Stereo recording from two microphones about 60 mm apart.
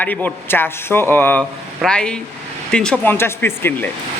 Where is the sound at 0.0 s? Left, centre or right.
Left.